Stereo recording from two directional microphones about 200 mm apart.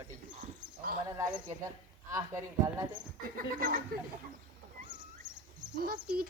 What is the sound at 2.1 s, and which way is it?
Speech, 15° right (ahead or behind).